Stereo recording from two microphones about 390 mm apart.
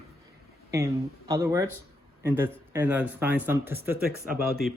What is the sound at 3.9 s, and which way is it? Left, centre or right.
Speech, right.